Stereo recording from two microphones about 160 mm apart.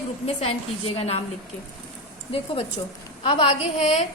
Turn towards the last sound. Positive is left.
turn(degrees=40)  # may be behind; listen again after turning